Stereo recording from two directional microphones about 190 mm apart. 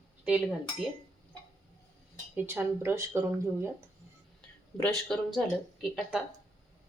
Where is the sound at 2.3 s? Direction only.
10° right (ahead or behind).